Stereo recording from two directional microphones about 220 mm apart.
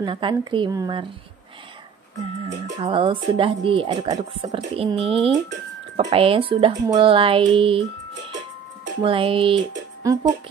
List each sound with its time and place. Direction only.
0.0 s speech: 20° right (ahead or behind)
2.4 s speech: 30° right (ahead or behind)
9.0 s speech: 25° right (ahead or behind)